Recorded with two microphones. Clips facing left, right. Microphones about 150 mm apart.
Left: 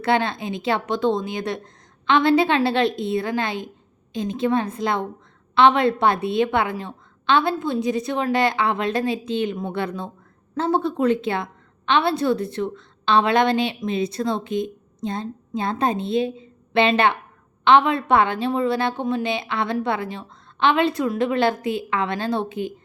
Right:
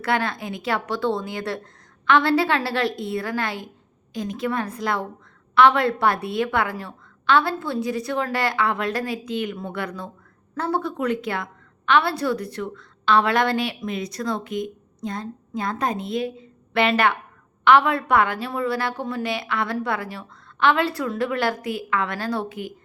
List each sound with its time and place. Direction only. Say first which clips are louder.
0.0 s a woman's voice: left 3 dB; 25° left (ahead or behind)